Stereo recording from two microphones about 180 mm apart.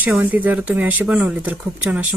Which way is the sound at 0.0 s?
10° right (ahead or behind).